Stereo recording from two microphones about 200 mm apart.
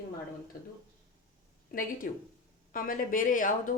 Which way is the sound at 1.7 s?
45° left (ahead or behind).